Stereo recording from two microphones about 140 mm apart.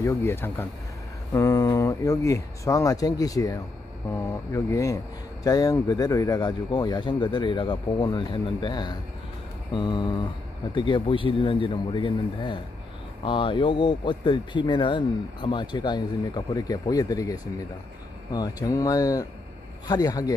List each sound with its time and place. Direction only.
0.0 s speech: 20° left (ahead or behind)